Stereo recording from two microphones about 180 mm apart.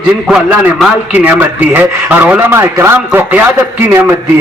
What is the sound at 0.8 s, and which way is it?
A man's voice, 10° right (ahead or behind).